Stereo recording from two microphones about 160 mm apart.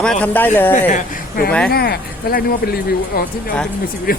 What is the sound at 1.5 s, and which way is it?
Speech, 5° left (ahead or behind).